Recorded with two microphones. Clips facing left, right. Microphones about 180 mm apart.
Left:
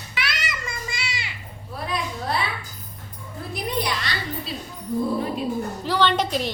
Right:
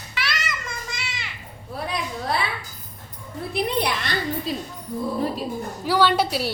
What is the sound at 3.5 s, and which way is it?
Speech, 60° right (ahead or behind).